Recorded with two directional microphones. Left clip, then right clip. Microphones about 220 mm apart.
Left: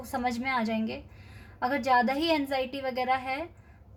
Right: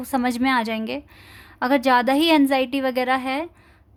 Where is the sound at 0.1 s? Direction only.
45° right (ahead or behind).